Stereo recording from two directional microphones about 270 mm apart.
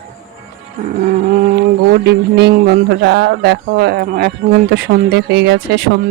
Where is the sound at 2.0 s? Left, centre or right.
Right.